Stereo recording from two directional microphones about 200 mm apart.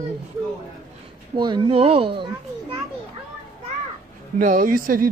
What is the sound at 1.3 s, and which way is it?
A child's voice, 25° right (ahead or behind).